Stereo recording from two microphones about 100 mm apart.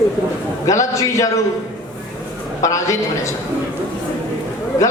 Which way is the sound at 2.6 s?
30° left (ahead or behind).